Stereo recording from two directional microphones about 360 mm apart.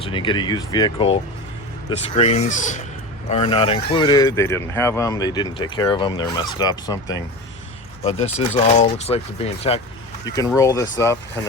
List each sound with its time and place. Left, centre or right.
0.0 s speech: centre